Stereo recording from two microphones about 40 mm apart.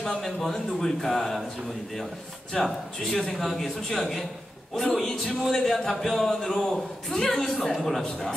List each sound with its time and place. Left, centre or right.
0.0 s a man's voice: centre
2.6 s a man's voice: centre
3.3 s a man's voice: centre